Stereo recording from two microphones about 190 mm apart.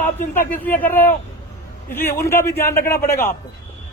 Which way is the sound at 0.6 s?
10° left (ahead or behind).